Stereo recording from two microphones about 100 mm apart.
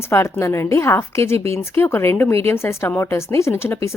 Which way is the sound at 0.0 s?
25° left (ahead or behind).